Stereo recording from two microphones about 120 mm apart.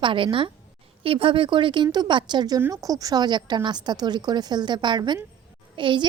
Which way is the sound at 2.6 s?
25° right (ahead or behind).